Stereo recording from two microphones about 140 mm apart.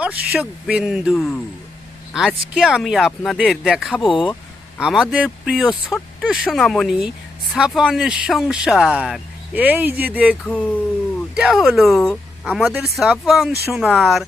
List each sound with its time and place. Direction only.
0.0 s speech: 10° right (ahead or behind)
2.6 s speech: 5° right (ahead or behind)
4.0 s speech: 35° left (ahead or behind)
4.8 s speech: 5° right (ahead or behind)
9.6 s speech: 10° right (ahead or behind)
10.4 s speech: 10° left (ahead or behind)
11.3 s speech: centre (ahead or behind)